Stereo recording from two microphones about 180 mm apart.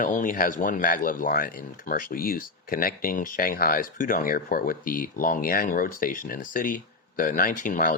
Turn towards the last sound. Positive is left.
turn(degrees=45)  # may be behind; listen again after turning